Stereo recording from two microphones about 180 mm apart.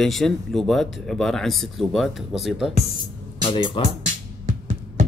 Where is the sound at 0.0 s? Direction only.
Centre (ahead or behind).